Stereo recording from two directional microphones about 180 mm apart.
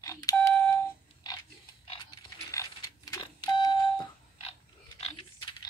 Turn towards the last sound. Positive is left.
turn(degrees=35)  # may be behind; listen again after turning